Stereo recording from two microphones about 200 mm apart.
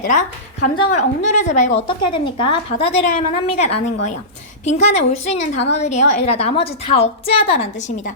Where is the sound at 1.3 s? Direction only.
35° left (ahead or behind).